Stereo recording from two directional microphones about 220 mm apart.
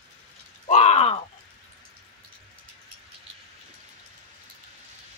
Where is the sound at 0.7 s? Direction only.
30° left (ahead or behind).